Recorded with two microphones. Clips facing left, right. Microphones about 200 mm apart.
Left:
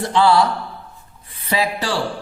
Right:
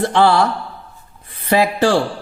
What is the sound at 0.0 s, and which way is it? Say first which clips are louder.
Speech: right 1 dB; 55° right (ahead or behind).